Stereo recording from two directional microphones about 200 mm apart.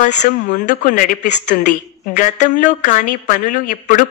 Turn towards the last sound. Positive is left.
turn(degrees=40)  # may be behind; listen again after turning